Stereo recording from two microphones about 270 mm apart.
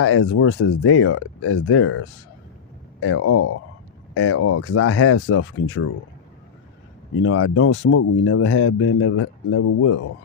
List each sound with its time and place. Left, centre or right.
0.0 s speech: left
7.2 s speech: left
7.8 s speech: left